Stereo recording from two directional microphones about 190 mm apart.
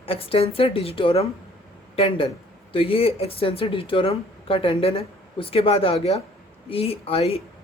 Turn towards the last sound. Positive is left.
turn(degrees=30)  # may be behind; listen again after turning